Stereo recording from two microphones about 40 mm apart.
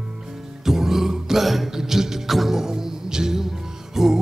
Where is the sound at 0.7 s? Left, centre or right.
Centre.